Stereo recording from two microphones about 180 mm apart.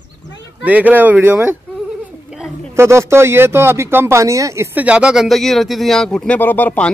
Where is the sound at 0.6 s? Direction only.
10° right (ahead or behind).